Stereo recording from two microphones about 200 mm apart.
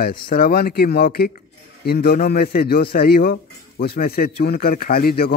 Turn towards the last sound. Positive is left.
turn(degrees=50)  # may be behind; listen again after turning